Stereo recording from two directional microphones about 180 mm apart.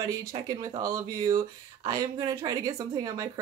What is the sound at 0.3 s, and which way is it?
Speech, 20° right (ahead or behind).